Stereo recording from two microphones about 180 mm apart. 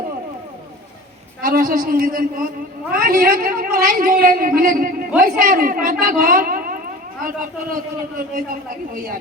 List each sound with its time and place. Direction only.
1.4 s a woman's voice: 50° right (ahead or behind)